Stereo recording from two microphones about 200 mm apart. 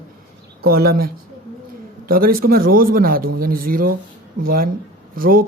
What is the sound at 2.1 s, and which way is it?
A man's voice, 45° right (ahead or behind).